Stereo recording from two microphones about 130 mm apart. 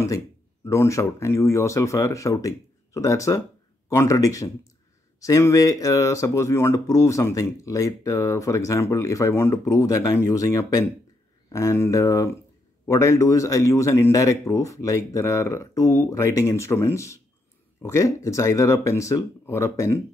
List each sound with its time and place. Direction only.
0.7 s speech: 25° left (ahead or behind)